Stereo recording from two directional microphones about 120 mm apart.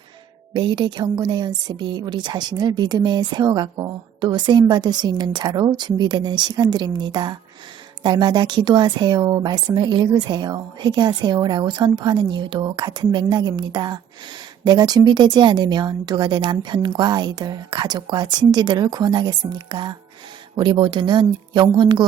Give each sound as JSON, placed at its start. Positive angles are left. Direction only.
{"t": 0.5, "sound": "a woman's voice", "side_deg": -40}